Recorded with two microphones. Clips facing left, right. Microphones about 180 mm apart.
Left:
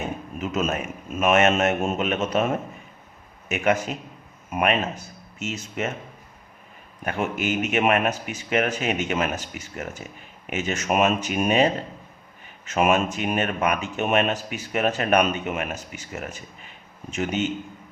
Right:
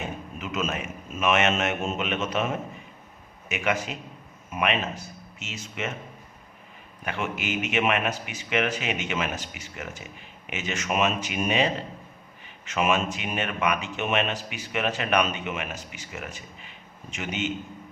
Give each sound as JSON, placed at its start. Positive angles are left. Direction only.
{"t": 0.3, "sound": "a man's voice", "side_deg": 40}
{"t": 7.0, "sound": "a man's voice", "side_deg": 45}